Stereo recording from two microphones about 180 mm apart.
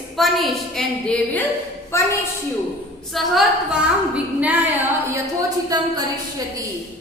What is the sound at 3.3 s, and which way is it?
A woman's voice, 5° right (ahead or behind).